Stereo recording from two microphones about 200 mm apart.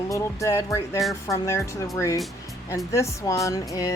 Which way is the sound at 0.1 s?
15° left (ahead or behind).